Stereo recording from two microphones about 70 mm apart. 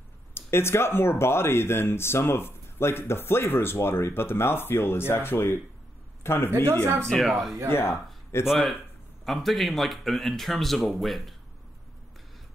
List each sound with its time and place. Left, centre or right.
0.3 s a man's voice: left
7.1 s speech: centre
7.7 s speech: left
8.5 s speech: centre